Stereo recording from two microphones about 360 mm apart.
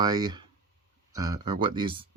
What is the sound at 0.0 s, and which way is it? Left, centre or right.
Speech, centre.